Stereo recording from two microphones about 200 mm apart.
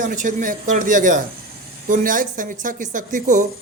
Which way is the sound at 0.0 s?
40° right (ahead or behind).